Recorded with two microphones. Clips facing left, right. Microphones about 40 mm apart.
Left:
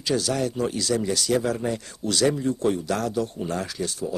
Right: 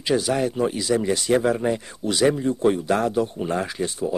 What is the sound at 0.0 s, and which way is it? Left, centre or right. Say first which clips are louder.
Speech: right 3 dB; right.